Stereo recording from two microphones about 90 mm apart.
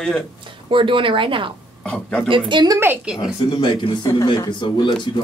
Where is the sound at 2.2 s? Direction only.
70° right (ahead or behind).